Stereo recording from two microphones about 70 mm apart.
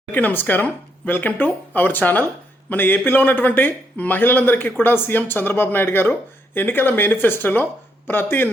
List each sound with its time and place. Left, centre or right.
0.1 s a man's voice: left